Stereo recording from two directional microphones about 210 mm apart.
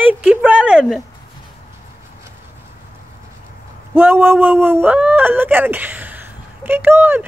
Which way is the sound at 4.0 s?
10° right (ahead or behind).